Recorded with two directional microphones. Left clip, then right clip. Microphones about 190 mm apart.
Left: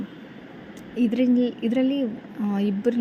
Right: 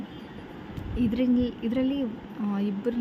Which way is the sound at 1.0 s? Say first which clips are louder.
Left 4 dB; 15° left (ahead or behind).